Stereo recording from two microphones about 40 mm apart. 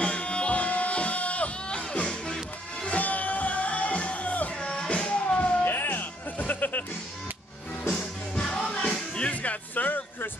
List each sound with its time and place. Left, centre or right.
0.0 s music: left
2.0 s music: left
2.9 s music: left
4.6 s music: left
5.6 s music: left
7.9 s music: centre
9.4 s music: left